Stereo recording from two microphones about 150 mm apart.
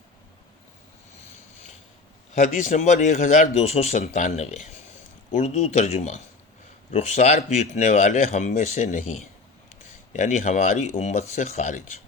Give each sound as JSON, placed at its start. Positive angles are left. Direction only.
{"t": 2.3, "sound": "speech", "side_deg": 50}